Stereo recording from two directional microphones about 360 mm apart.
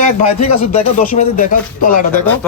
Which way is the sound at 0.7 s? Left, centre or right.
Centre.